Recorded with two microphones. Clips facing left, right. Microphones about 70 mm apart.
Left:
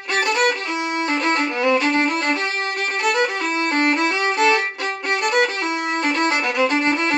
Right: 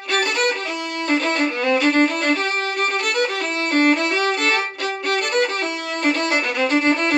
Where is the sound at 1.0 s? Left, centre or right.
Left.